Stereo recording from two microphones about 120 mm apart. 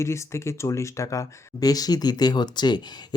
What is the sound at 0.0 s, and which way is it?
Speech, 25° left (ahead or behind).